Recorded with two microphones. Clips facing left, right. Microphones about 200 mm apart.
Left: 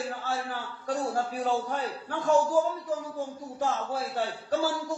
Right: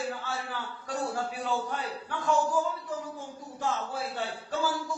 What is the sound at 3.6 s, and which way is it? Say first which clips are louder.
A man's voice: left 2 dB; 40° left (ahead or behind).